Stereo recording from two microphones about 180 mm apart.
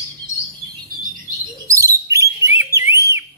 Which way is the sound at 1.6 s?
15° right (ahead or behind).